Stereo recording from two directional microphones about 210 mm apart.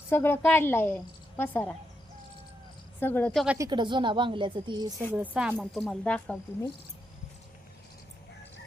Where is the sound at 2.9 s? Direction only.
10° left (ahead or behind).